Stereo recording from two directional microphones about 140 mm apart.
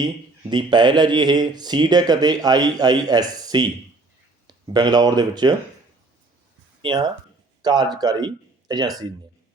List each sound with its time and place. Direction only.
0.5 s speech: 30° right (ahead or behind)
6.8 s speech: 30° right (ahead or behind)